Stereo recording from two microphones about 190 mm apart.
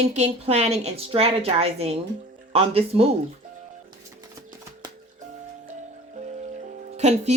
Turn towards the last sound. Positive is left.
turn(degrees=-35)  # may be behind; listen again after turning